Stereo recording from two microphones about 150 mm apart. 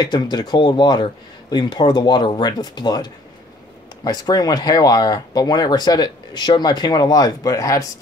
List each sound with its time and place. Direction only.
0.0 s speech: 30° left (ahead or behind)